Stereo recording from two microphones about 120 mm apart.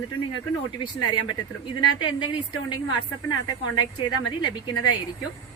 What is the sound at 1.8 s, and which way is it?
A woman's voice, 40° left (ahead or behind).